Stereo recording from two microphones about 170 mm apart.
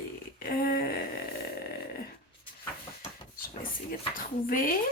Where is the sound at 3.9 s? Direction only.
55° left (ahead or behind).